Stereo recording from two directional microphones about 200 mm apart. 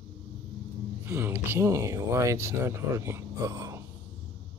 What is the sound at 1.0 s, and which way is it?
Speech, 10° right (ahead or behind).